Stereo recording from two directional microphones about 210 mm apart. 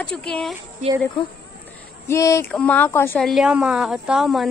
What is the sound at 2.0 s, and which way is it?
A woman's voice, 15° left (ahead or behind).